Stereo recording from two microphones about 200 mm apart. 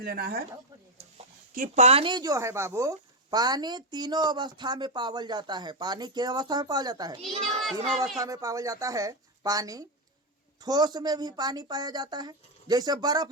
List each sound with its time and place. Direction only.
0.0 s speech: 50° right (ahead or behind)
1.5 s speech: 40° right (ahead or behind); by 7.3 s 20° right (ahead or behind)
7.4 s a child's voice: centre (ahead or behind)
8.2 s speech: 15° right (ahead or behind)